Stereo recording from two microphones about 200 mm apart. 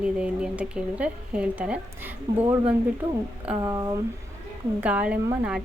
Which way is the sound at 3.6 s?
15° right (ahead or behind).